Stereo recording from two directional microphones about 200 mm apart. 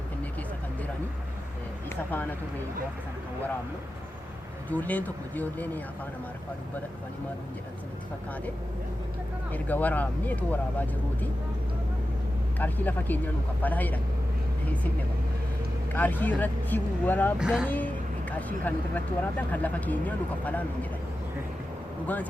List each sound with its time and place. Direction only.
4.7 s speech: 10° left (ahead or behind)
9.5 s speech: 10° left (ahead or behind)
12.5 s speech: 10° left (ahead or behind)
15.9 s speech: 10° left (ahead or behind)
17.4 s speech: 5° right (ahead or behind)
17.7 s speech: 5° left (ahead or behind)
22.0 s speech: 10° left (ahead or behind)